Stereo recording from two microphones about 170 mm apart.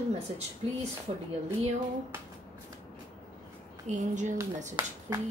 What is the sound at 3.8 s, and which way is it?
Speech, 45° right (ahead or behind).